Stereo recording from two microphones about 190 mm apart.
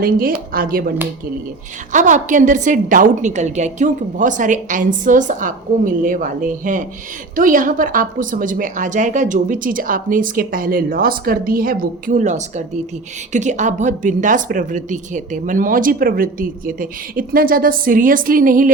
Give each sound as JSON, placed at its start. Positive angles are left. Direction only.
{"t": 0.0, "sound": "a woman's voice", "side_deg": -50}